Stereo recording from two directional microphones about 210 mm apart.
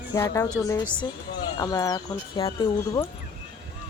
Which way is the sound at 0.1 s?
15° left (ahead or behind).